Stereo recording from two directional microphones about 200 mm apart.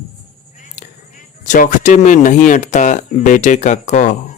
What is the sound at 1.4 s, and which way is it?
Speech, 40° left (ahead or behind).